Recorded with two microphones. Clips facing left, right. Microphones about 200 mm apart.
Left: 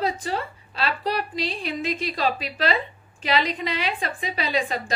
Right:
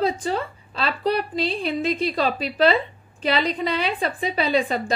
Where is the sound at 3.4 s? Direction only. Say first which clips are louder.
Right 3 dB; 35° right (ahead or behind).